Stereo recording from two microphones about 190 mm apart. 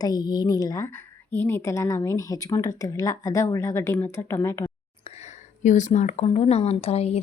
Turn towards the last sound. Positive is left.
turn(degrees=30)  # may be behind; listen again after turning